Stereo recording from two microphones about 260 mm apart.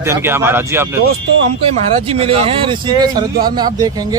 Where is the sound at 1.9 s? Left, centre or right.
Right.